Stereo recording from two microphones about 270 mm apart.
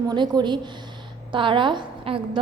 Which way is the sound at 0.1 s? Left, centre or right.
Centre.